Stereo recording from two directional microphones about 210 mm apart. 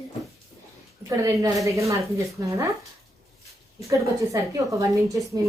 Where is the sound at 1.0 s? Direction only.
15° right (ahead or behind).